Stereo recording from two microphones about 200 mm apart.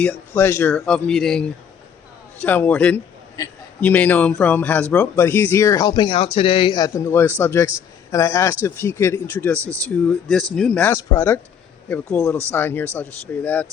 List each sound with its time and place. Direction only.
0.0 s a man's voice: 10° left (ahead or behind)
12.5 s a man's voice: 10° left (ahead or behind)